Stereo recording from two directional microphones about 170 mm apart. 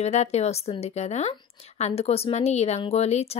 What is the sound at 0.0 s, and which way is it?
Speech, 40° left (ahead or behind).